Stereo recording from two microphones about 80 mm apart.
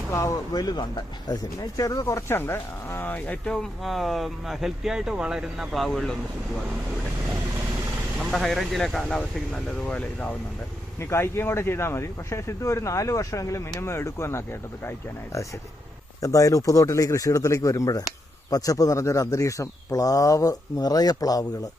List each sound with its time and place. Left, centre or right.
0.1 s speech: left
0.5 s speech: left
3.4 s speech: centre
8.2 s speech: centre
11.1 s speech: left